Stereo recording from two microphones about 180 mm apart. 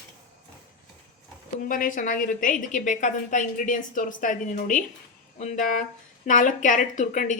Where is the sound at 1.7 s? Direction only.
50° left (ahead or behind).